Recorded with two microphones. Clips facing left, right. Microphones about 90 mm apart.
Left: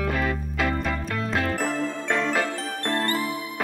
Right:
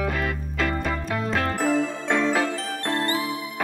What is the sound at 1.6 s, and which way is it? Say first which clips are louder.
Music: right 4 dB; 10° right (ahead or behind).